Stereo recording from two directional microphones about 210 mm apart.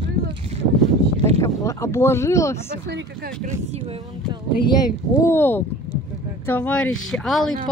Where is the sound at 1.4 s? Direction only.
15° left (ahead or behind).